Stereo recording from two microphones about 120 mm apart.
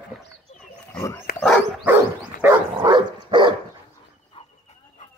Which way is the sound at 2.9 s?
40° right (ahead or behind).